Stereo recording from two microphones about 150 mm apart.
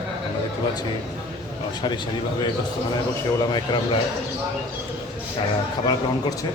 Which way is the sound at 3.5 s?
30° left (ahead or behind).